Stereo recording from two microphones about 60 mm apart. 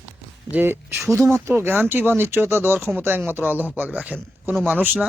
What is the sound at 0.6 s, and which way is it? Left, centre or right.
Speech, right.